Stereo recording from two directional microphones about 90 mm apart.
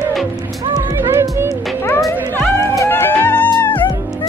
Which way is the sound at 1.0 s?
30° right (ahead or behind).